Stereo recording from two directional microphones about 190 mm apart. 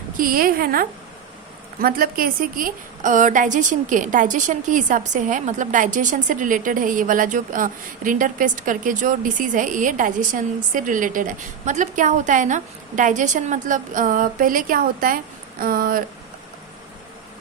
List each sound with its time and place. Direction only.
0.2 s a woman's voice: 50° right (ahead or behind)